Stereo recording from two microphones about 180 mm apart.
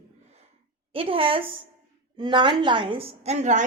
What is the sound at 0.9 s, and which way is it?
A woman's voice, 30° right (ahead or behind).